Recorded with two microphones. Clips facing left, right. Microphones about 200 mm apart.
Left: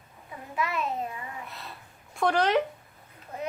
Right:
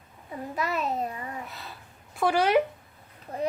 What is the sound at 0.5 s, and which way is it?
Speech, 40° right (ahead or behind).